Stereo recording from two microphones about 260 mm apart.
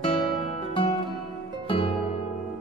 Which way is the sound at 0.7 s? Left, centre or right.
Centre.